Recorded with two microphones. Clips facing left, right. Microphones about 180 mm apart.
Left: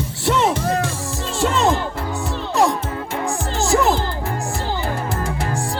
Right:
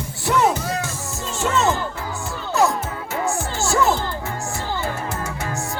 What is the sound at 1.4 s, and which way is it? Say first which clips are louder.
Music: left 2 dB; 30° left (ahead or behind).